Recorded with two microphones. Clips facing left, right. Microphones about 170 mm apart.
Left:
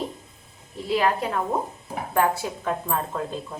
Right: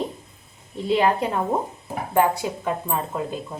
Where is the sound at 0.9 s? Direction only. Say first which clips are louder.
Right 3 dB; 20° right (ahead or behind).